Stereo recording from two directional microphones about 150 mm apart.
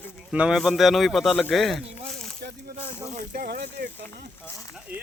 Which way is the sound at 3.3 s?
90° right.